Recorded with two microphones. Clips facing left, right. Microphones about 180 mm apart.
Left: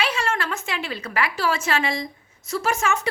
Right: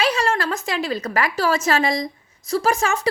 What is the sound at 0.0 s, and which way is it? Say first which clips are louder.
A woman's voice: right 4 dB; 40° right (ahead or behind).